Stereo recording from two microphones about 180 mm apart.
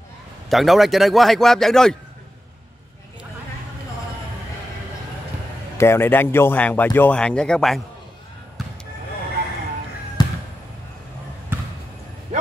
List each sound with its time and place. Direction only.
0.5 s speech: centre (ahead or behind)
5.8 s speech: 15° left (ahead or behind)
10.2 s basketball bounce: 20° left (ahead or behind)